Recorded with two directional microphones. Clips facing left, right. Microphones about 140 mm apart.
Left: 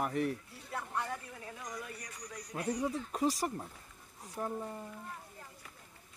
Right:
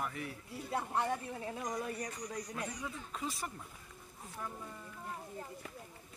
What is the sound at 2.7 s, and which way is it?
Speech, 40° left (ahead or behind).